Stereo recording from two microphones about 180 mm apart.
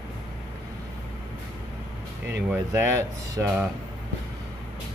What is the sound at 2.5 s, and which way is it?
Speech, 15° right (ahead or behind).